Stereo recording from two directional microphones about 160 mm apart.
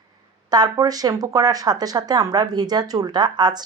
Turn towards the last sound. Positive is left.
turn(degrees=-25)  # may be behind; listen again after turning